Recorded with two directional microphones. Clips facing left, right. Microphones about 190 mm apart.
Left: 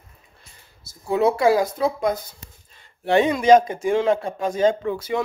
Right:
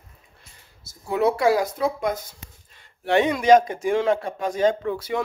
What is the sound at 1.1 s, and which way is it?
A man's voice, 25° left (ahead or behind).